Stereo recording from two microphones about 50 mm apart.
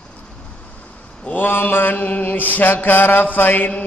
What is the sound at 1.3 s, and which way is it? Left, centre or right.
Mantra, left.